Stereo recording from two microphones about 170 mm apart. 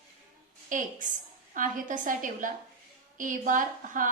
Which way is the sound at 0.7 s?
50° right (ahead or behind).